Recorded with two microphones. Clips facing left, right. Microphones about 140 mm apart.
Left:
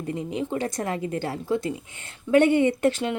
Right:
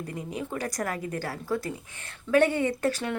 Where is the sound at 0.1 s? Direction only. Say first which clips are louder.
Left 9 dB; 25° left (ahead or behind).